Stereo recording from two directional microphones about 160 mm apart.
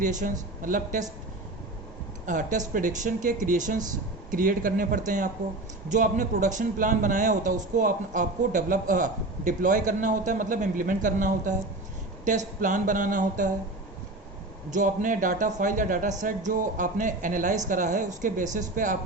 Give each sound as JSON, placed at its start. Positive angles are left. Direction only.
{"t": 0.0, "sound": "a man's voice", "side_deg": -50}
{"t": 2.2, "sound": "a man's voice", "side_deg": -50}
{"t": 12.5, "sound": "speech", "side_deg": -55}
{"t": 14.7, "sound": "a man's voice", "side_deg": -55}